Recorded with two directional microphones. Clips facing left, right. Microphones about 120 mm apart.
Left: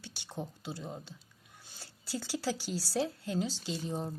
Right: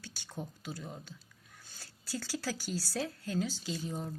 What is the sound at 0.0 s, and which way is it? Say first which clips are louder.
Speech: left 2 dB; 25° left (ahead or behind).